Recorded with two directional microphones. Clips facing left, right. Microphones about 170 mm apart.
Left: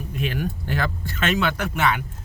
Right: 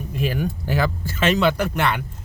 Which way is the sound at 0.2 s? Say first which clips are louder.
Right 3 dB; centre (ahead or behind).